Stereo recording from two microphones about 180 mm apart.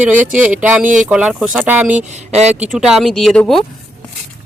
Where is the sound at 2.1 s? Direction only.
40° right (ahead or behind).